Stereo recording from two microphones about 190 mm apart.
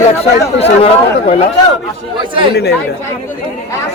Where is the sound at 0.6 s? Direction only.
35° left (ahead or behind).